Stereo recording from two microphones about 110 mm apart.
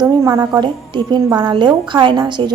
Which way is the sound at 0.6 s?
45° right (ahead or behind).